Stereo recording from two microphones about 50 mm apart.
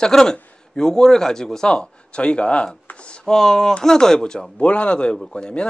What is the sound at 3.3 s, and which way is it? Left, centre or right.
Speech, centre.